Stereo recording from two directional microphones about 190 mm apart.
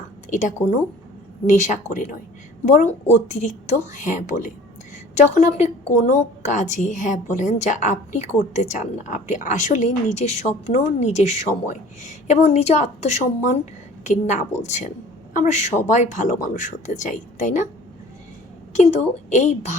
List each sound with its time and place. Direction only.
0.3 s a woman's voice: 40° left (ahead or behind)
18.7 s a woman's voice: 40° left (ahead or behind)